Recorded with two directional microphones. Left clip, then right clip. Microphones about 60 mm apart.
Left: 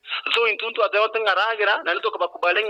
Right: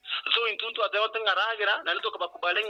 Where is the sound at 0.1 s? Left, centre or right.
Left.